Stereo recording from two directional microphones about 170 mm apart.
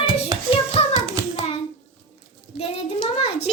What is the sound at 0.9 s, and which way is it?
Hands, 20° right (ahead or behind).